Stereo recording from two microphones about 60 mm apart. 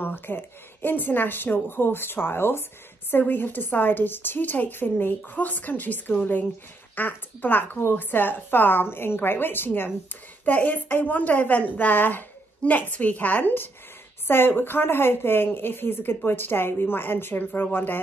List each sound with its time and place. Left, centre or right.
0.0 s a woman's voice: left